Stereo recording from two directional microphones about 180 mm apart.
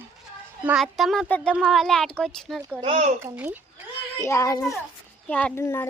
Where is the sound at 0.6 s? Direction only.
5° right (ahead or behind).